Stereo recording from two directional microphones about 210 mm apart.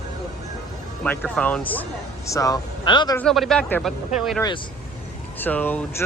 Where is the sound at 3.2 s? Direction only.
Centre (ahead or behind).